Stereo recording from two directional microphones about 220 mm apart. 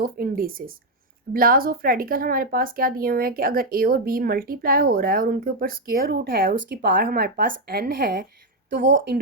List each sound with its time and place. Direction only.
0.0 s speech: 40° right (ahead or behind)